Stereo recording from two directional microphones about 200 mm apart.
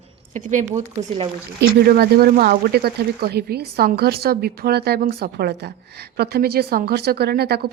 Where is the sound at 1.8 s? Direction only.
50° right (ahead or behind).